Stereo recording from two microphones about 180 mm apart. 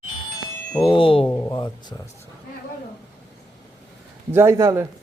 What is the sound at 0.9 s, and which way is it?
Speech, 30° left (ahead or behind).